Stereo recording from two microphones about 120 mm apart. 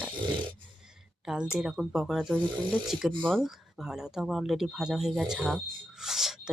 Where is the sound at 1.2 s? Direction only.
5° right (ahead or behind).